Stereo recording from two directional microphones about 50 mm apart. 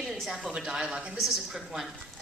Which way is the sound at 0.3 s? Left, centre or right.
Centre.